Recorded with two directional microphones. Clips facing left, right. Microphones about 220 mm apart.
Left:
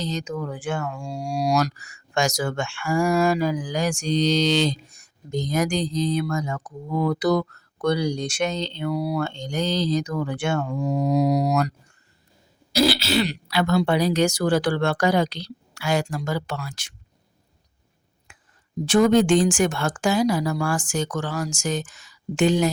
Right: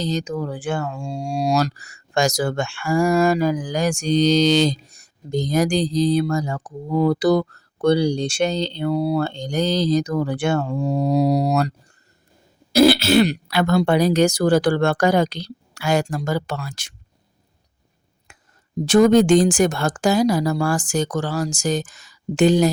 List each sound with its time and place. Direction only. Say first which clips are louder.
0.0 s speech: right 4 dB; 35° right (ahead or behind)
12.7 s speech: right 7 dB; 55° right (ahead or behind); by 16.9 s 40° right (ahead or behind)
18.3 s a sound: right 3 dB; 40° right (ahead or behind)
18.9 s speech: right 4 dB; 40° right (ahead or behind)